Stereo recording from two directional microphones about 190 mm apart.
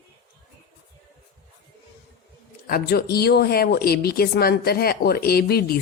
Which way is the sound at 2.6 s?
55° left (ahead or behind).